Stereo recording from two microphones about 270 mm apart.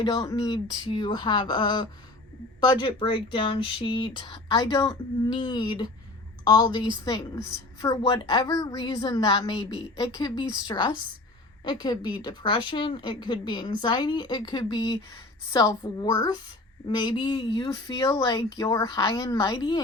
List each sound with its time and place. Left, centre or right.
0.0 s a woman's voice: centre